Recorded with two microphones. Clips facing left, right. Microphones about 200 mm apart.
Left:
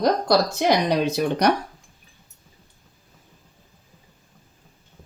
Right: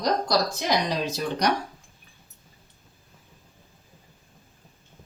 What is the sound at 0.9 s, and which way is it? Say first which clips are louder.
Speech: left 6 dB; 60° left (ahead or behind).